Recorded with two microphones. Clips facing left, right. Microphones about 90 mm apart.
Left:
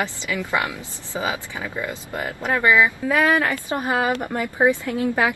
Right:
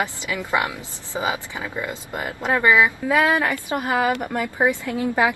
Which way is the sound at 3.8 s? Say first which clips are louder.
Right 1 dB; 20° left (ahead or behind).